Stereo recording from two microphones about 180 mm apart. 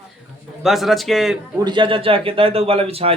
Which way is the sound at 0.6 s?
Centre (ahead or behind).